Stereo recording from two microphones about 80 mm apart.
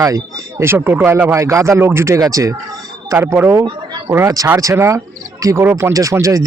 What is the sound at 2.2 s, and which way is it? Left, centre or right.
Speech, right.